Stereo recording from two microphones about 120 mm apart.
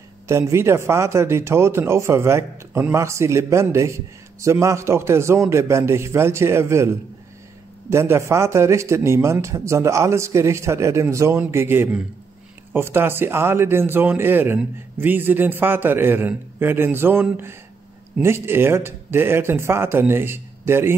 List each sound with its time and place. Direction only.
0.3 s a man's voice: 25° right (ahead or behind)